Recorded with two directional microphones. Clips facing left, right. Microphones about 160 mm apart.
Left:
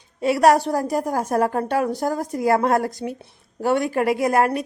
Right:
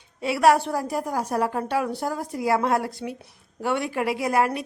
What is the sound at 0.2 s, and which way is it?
A woman's voice, 45° left (ahead or behind).